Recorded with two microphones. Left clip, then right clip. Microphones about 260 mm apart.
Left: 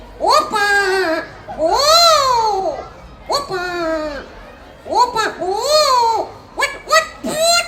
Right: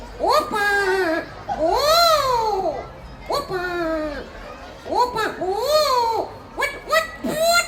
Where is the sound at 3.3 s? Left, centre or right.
Centre.